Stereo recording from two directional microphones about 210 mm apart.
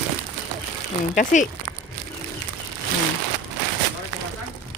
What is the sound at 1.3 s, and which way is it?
Speech, 35° left (ahead or behind).